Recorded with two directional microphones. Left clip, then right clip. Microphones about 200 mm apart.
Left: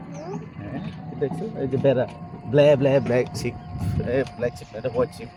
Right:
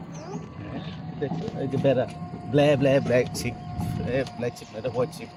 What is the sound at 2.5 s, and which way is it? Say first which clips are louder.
Speech: left 4 dB; 50° left (ahead or behind).